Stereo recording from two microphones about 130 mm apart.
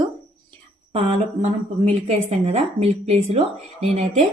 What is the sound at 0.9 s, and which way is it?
A woman's voice, 50° right (ahead or behind).